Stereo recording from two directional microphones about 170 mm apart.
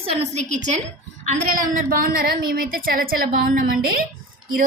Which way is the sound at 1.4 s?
55° right (ahead or behind).